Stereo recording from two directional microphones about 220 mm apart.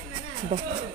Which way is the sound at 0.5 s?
25° right (ahead or behind).